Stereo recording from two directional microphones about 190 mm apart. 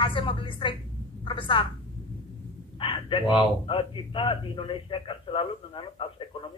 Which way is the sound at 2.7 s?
30° left (ahead or behind).